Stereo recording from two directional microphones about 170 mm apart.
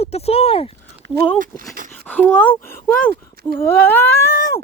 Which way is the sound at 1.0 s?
90° right.